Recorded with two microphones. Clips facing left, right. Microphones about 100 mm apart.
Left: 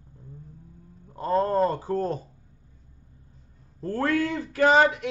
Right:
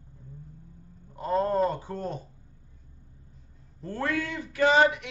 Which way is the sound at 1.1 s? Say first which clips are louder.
Left 2 dB; 40° left (ahead or behind).